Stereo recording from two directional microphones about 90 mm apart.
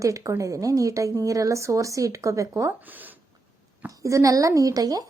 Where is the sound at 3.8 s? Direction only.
35° right (ahead or behind).